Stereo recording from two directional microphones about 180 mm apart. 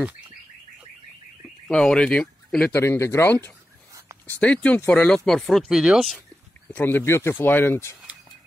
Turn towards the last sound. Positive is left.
turn(degrees=10)  # may be behind; listen again after turning